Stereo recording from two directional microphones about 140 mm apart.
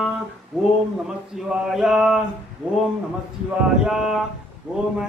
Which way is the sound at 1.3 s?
Centre (ahead or behind).